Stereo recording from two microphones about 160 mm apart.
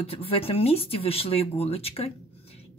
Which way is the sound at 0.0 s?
35° left (ahead or behind).